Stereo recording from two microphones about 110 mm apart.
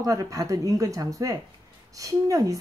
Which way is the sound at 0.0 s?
30° right (ahead or behind).